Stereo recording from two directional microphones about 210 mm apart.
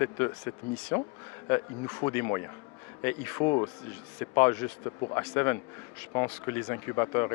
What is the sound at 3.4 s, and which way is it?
Speech, 25° left (ahead or behind).